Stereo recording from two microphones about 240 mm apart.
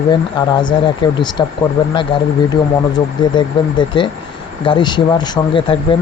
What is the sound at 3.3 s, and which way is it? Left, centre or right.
Speech, centre.